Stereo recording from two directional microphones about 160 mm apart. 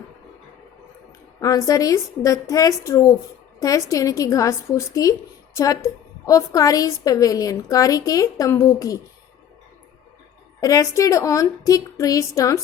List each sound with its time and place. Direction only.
1.4 s a woman's voice: 20° left (ahead or behind)
10.6 s a woman's voice: 20° left (ahead or behind)